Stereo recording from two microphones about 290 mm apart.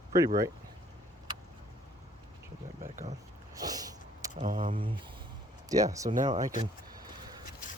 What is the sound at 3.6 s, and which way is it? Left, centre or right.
Sniff, centre.